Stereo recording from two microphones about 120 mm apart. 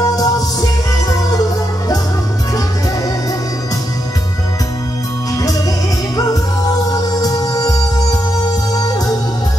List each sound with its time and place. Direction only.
0.0 s music: 30° left (ahead or behind)
6.1 s music: 30° left (ahead or behind)
6.9 s organ: 30° left (ahead or behind)